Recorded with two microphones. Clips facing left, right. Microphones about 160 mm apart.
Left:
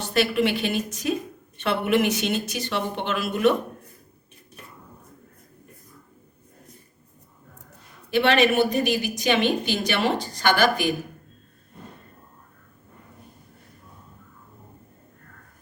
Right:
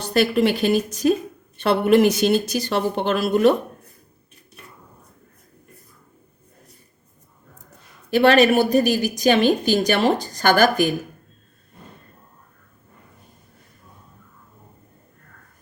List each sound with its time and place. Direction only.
0.0 s a woman's voice: 40° right (ahead or behind)
8.1 s a woman's voice: 40° right (ahead or behind)